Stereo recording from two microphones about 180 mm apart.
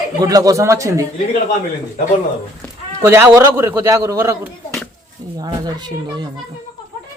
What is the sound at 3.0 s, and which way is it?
A woman's voice, 15° right (ahead or behind).